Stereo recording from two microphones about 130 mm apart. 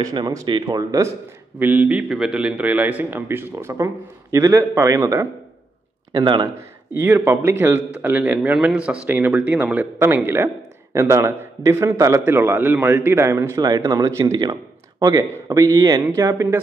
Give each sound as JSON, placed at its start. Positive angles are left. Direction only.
{"t": 0.0, "sound": "speech", "side_deg": -30}
{"t": 1.6, "sound": "a man's voice", "side_deg": -15}
{"t": 6.9, "sound": "a man's voice", "side_deg": -15}